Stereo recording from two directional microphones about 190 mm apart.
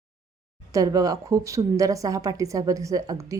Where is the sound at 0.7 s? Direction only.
20° right (ahead or behind).